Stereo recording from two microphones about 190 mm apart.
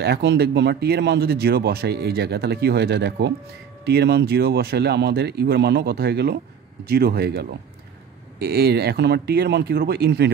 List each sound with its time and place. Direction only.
0.0 s speech: 60° right (ahead or behind)